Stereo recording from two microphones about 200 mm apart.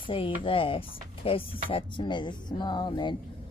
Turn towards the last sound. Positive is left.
turn(degrees=20)  # may be behind; listen again after turning